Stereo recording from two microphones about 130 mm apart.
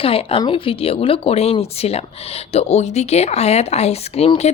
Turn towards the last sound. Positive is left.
turn(degrees=55)  # may be behind; listen again after turning